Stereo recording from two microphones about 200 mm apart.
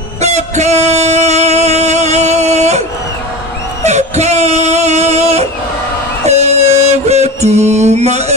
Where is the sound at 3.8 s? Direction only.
35° right (ahead or behind).